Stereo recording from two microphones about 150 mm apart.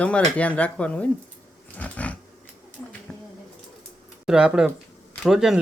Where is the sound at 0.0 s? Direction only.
10° left (ahead or behind).